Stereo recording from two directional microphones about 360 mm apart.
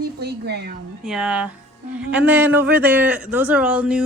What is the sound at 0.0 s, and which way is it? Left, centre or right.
Speech, right.